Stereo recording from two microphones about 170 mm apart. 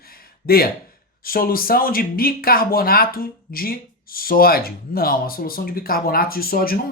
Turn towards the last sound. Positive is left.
turn(degrees=60)  # may be behind; listen again after turning